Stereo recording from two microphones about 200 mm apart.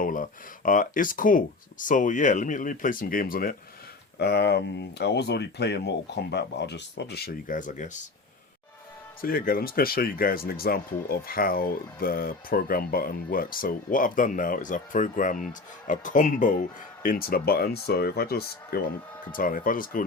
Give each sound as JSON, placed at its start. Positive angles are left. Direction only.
{"t": 0.0, "sound": "speech", "side_deg": 40}
{"t": 9.2, "sound": "speech", "side_deg": 45}